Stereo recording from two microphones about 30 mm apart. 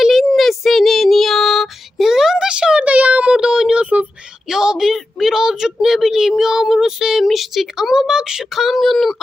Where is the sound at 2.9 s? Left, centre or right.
Right.